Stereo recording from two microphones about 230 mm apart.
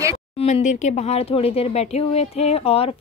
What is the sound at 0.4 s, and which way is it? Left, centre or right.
Speech, left.